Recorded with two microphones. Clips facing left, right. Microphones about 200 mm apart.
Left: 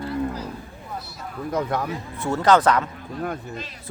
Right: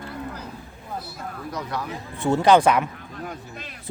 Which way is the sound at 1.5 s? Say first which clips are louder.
Left 7 dB; 50° left (ahead or behind).